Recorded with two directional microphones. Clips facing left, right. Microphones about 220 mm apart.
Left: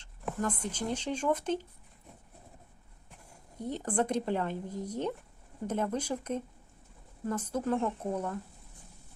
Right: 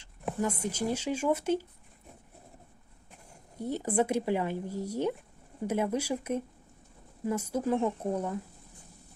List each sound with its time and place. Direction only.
0.0 s speech: 10° right (ahead or behind)
3.6 s speech: 10° right (ahead or behind)